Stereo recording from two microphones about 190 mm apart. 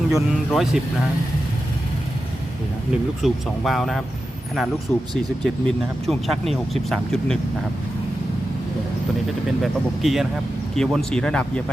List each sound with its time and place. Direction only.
0.1 s speech: centre (ahead or behind)
3.2 s speech: centre (ahead or behind)
9.6 s speech: centre (ahead or behind)